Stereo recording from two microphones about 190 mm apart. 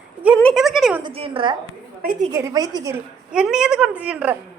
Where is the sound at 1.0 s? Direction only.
25° right (ahead or behind).